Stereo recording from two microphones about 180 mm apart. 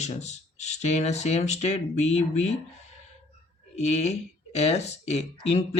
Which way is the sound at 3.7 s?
40° left (ahead or behind).